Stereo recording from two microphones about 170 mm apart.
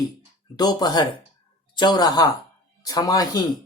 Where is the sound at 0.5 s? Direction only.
25° left (ahead or behind).